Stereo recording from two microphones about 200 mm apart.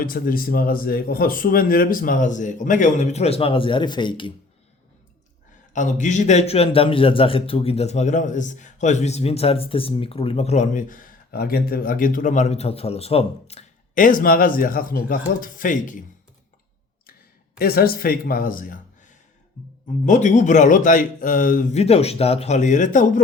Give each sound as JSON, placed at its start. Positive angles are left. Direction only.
{"t": 0.0, "sound": "speech", "side_deg": 45}
{"t": 5.7, "sound": "a man's voice", "side_deg": 40}
{"t": 17.6, "sound": "speech", "side_deg": 50}
{"t": 20.1, "sound": "a man's voice", "side_deg": 35}